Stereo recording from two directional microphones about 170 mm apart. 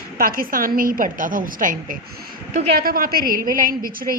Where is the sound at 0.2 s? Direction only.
55° right (ahead or behind).